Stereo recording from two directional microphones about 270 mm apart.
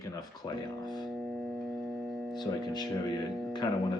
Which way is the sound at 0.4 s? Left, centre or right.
Centre.